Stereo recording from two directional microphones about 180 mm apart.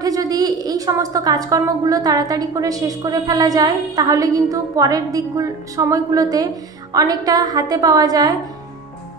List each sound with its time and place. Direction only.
0.0 s a woman's voice: 20° right (ahead or behind)